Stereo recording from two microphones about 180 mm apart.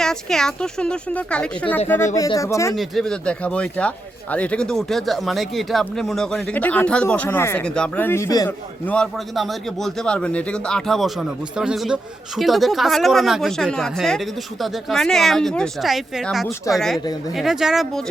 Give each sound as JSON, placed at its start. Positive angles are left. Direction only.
{"t": 0.0, "sound": "speech", "side_deg": 5}
{"t": 2.1, "sound": "speech", "side_deg": 20}
{"t": 2.7, "sound": "speech", "side_deg": 0}
{"t": 8.9, "sound": "speech", "side_deg": 0}
{"t": 17.0, "sound": "speech", "side_deg": 20}
{"t": 17.3, "sound": "speech", "side_deg": 0}